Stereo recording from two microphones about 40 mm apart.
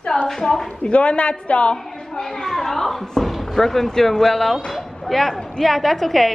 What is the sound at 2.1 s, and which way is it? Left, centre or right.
A woman's voice, centre.